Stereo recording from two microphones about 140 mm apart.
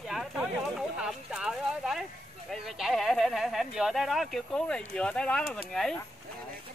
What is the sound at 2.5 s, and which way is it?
Speech, centre (ahead or behind).